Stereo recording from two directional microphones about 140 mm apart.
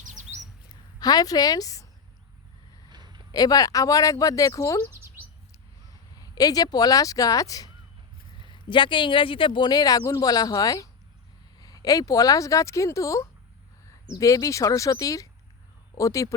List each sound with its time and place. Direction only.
0.1 s bird: 60° right (ahead or behind)
0.7 s a sound: 30° left (ahead or behind)
2.9 s a sound: 30° right (ahead or behind)
3.3 s speech: 25° left (ahead or behind)
4.9 s chirp: 15° right (ahead or behind)
6.1 s speech: 25° left (ahead or behind)
8.4 s speech: 35° left (ahead or behind)